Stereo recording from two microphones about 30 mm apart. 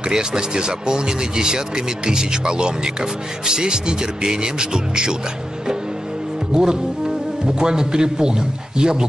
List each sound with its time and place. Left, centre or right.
0.1 s speech: right
6.5 s speech: right